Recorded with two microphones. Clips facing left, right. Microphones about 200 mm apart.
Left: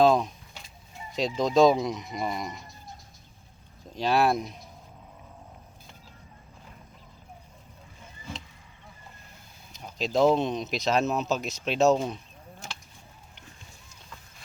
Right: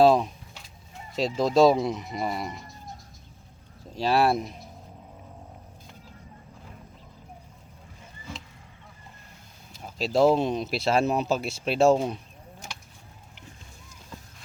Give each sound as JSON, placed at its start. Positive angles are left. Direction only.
{"t": 0.0, "sound": "a sound", "side_deg": -5}
{"t": 1.1, "sound": "speech", "side_deg": -5}
{"t": 3.9, "sound": "speech", "side_deg": -5}
{"t": 9.7, "sound": "speech", "side_deg": -5}